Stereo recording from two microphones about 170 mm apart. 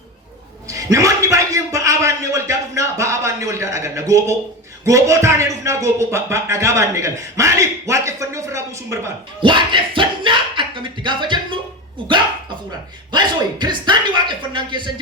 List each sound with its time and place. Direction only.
0.7 s a sound: 20° right (ahead or behind)
4.9 s speech: 20° right (ahead or behind)
9.4 s speech: 30° right (ahead or behind)
13.1 s a man's voice: 25° right (ahead or behind)